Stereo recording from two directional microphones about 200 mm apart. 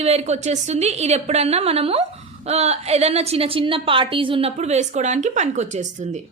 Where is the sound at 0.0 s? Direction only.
30° right (ahead or behind).